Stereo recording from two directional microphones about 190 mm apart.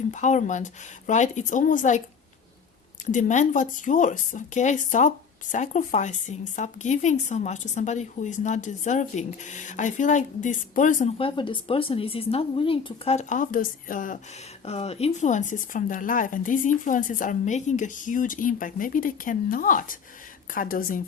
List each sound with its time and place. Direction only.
0.1 s speech: 40° left (ahead or behind)
3.1 s speech: 40° left (ahead or behind)
11.2 s speech: 25° left (ahead or behind); by 14.2 s 45° left (ahead or behind)
14.6 s speech: 35° left (ahead or behind); by 21.0 s 50° left (ahead or behind)